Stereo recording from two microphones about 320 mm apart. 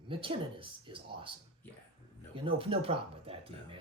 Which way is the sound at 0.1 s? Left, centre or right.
Centre.